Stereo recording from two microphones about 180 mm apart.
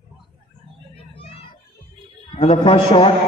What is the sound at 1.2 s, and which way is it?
Music, 30° left (ahead or behind).